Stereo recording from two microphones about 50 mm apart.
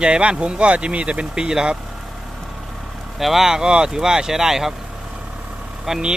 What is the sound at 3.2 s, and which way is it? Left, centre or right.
Speech, centre.